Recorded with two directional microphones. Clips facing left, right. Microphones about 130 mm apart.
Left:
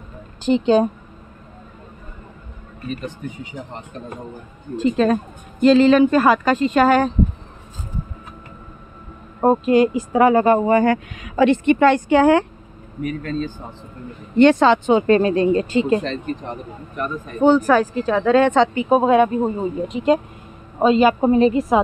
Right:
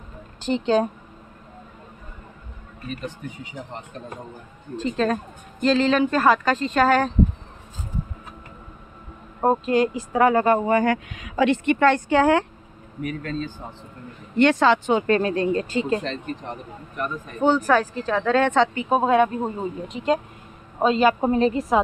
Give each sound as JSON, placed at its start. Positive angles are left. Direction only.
{"t": 0.5, "sound": "speech", "side_deg": 10}
{"t": 4.7, "sound": "speech", "side_deg": 5}
{"t": 9.4, "sound": "speech", "side_deg": 10}
{"t": 11.1, "sound": "speech", "side_deg": 45}
{"t": 11.9, "sound": "a woman's voice", "side_deg": 5}
{"t": 14.3, "sound": "speech", "side_deg": 25}
{"t": 17.4, "sound": "speech", "side_deg": 5}